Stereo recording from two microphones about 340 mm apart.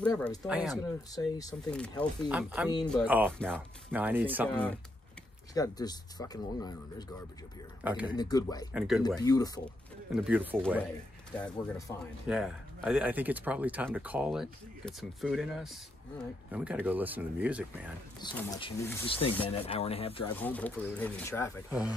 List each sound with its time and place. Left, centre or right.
0.0 s speech: centre
0.5 s speech: centre
1.1 s speech: centre
7.8 s speech: centre
8.1 s speech: centre
8.7 s speech: centre
9.0 s speech: centre
10.2 s speech: centre
18.2 s speech: centre
20.2 s speech: centre